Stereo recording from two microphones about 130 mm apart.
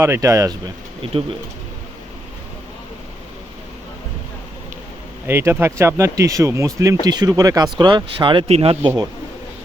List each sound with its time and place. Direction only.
0.0 s speech: 20° right (ahead or behind)
5.2 s speech: 20° right (ahead or behind); by 8.4 s 40° right (ahead or behind)
8.4 s speech: 50° right (ahead or behind)